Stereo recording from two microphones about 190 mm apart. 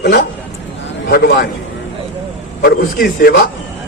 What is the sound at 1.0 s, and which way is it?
Speech, 60° left (ahead or behind).